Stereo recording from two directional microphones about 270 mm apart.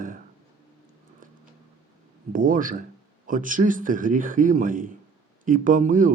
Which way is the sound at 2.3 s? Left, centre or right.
Right.